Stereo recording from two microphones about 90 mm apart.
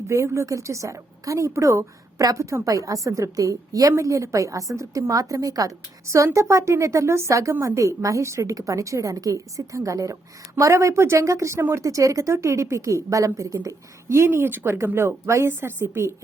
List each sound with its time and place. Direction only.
0.1 s a woman's voice: 35° right (ahead or behind)